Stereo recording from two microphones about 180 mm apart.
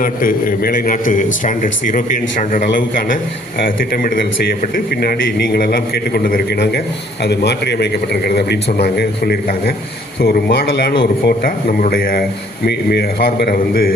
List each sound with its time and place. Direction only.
0.0 s a man's voice: 50° left (ahead or behind)